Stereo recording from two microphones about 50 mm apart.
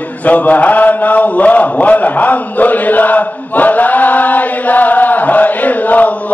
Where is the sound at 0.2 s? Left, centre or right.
Left.